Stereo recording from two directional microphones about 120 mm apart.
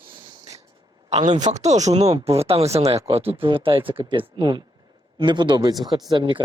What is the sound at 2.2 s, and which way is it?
Speech, 55° right (ahead or behind).